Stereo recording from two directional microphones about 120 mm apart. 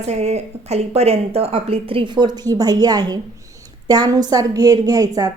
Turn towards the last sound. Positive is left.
turn(degrees=-30)  # may be behind; listen again after turning